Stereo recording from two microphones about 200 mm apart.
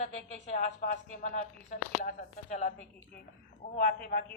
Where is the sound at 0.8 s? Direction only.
40° left (ahead or behind).